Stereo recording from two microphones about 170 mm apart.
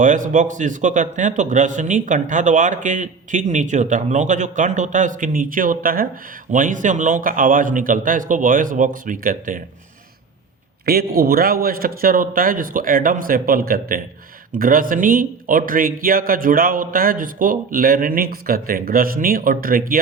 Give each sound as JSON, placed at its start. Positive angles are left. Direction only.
{"t": 0.0, "sound": "a man's voice", "side_deg": -50}
{"t": 10.8, "sound": "speech", "side_deg": -60}